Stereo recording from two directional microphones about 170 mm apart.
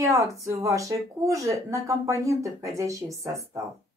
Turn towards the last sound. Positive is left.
turn(degrees=-20)  # may be behind; listen again after turning